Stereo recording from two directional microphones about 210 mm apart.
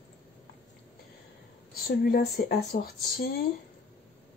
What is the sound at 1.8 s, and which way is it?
Speech, 45° left (ahead or behind).